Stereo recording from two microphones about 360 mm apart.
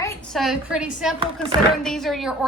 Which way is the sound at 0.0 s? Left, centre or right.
Centre.